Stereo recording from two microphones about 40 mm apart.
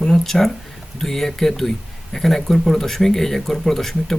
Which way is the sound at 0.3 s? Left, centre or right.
Centre.